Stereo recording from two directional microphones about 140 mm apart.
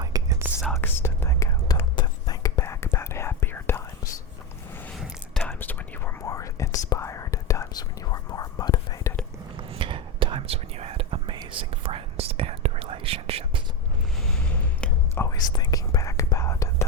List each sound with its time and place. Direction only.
0.0 s whispering: 25° right (ahead or behind)
0.8 s whispering: 15° left (ahead or behind)
5.4 s whispering: 10° left (ahead or behind)
9.6 s whispering: 40° right (ahead or behind)
14.8 s whispering: 5° left (ahead or behind)
15.2 s whispering: 25° left (ahead or behind)